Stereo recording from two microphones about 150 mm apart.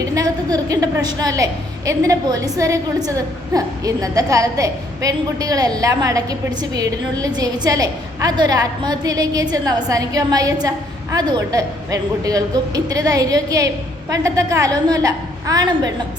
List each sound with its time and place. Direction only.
0.0 s a woman's voice: 25° right (ahead or behind)